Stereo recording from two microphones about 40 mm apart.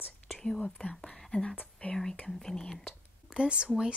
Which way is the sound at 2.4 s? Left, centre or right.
Centre.